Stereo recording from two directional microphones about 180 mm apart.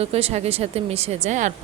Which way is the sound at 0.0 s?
35° right (ahead or behind).